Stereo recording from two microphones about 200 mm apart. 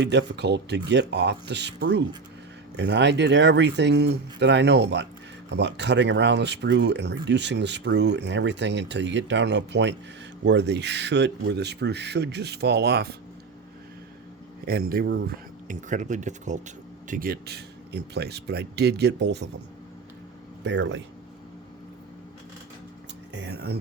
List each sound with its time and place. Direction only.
0.1 s speech: 60° right (ahead or behind)
14.6 s speech: 50° right (ahead or behind)
15.6 s speech: 40° right (ahead or behind); by 19.5 s 60° right (ahead or behind)
20.7 s speech: 65° right (ahead or behind)
23.3 s speech: 60° right (ahead or behind)